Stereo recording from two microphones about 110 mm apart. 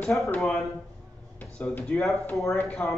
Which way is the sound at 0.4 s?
Centre (ahead or behind).